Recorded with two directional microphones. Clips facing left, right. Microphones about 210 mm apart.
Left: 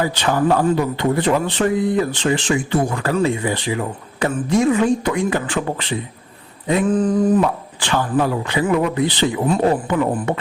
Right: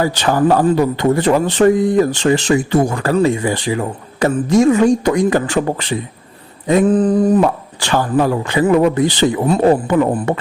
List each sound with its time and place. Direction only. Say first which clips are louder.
0.0 s speech: right 4 dB; 40° right (ahead or behind)